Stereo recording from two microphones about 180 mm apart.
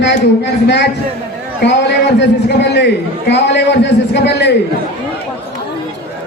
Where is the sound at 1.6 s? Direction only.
70° left (ahead or behind).